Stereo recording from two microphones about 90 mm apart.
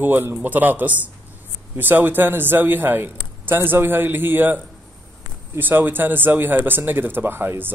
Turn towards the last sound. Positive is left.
turn(degrees=-25)  # may be behind; listen again after turning